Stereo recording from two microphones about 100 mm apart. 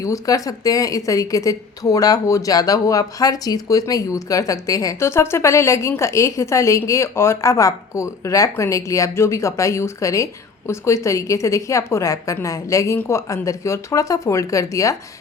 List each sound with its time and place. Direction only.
0.0 s a woman's voice: 35° left (ahead or behind)